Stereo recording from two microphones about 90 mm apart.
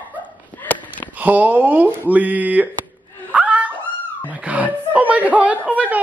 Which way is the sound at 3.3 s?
15° right (ahead or behind).